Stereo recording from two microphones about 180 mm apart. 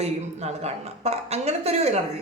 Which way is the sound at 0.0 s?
35° right (ahead or behind).